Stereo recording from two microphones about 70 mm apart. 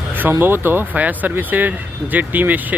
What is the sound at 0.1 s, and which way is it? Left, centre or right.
Speech, right.